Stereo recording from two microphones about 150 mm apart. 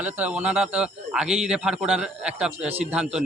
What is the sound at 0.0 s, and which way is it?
A man's voice, 10° right (ahead or behind).